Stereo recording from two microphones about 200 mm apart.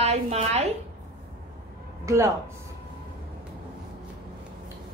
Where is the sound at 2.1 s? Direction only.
15° right (ahead or behind).